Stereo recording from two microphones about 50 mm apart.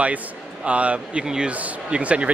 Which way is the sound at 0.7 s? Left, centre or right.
Right.